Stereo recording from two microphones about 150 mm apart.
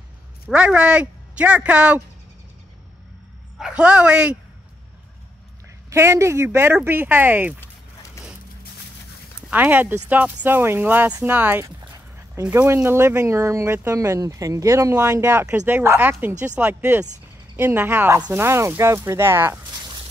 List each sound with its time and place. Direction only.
0.5 s speech: 5° right (ahead or behind)
3.5 s speech: 5° right (ahead or behind)
5.9 s speech: 20° right (ahead or behind)
9.5 s speech: 10° right (ahead or behind)
11.6 s dog: 25° right (ahead or behind)
12.4 s speech: 15° right (ahead or behind)